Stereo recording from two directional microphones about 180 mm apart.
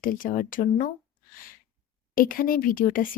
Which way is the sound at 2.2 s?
50° left (ahead or behind).